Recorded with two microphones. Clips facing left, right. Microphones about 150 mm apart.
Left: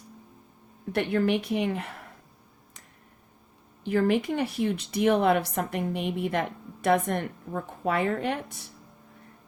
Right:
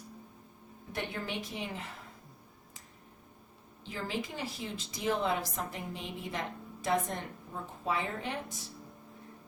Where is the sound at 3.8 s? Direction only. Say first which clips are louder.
Left 13 dB; 60° left (ahead or behind).